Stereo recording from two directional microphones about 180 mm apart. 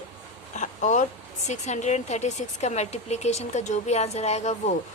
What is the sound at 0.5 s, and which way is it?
A woman's voice, 45° left (ahead or behind).